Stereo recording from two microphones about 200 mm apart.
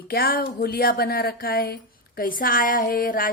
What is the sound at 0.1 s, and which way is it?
Speech, 50° left (ahead or behind).